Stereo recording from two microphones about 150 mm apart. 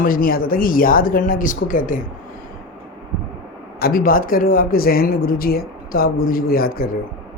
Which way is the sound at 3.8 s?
75° left (ahead or behind).